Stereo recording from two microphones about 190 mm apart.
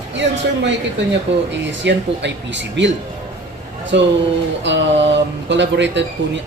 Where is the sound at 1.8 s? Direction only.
70° right (ahead or behind).